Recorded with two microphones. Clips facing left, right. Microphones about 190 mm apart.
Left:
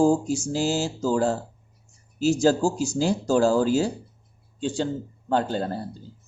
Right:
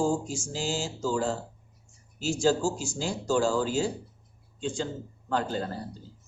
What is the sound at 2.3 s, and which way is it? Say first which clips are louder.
Speech: left 3 dB; 40° left (ahead or behind).